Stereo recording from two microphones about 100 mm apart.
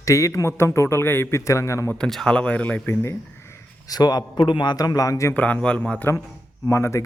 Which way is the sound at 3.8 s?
40° left (ahead or behind).